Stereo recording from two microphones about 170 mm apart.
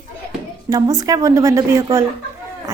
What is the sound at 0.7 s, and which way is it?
A woman's voice, 20° right (ahead or behind).